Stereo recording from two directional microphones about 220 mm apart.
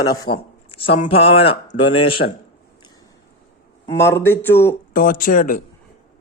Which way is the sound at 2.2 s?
45° left (ahead or behind).